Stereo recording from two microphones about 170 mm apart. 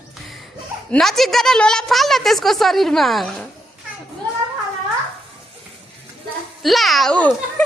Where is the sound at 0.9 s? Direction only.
Centre (ahead or behind).